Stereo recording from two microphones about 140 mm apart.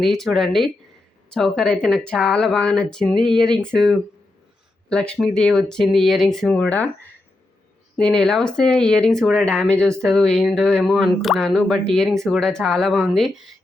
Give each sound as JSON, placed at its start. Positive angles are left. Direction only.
{"t": 0.0, "sound": "speech", "side_deg": 0}